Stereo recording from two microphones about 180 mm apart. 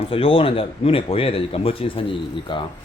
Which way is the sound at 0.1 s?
30° left (ahead or behind).